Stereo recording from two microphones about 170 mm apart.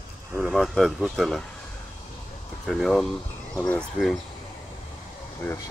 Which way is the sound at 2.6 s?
Centre (ahead or behind).